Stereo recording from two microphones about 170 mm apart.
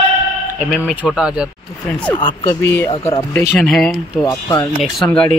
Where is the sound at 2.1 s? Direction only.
25° left (ahead or behind).